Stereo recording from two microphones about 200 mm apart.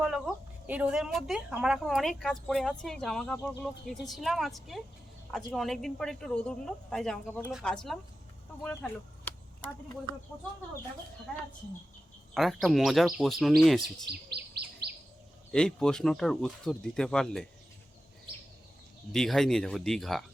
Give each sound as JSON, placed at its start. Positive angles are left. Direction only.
{"t": 0.0, "sound": "a woman's voice", "side_deg": 0}
{"t": 12.3, "sound": "a woman's voice", "side_deg": 0}
{"t": 14.1, "sound": "chirp", "side_deg": -55}
{"t": 15.5, "sound": "a woman's voice", "side_deg": 5}
{"t": 19.1, "sound": "a woman's voice", "side_deg": 0}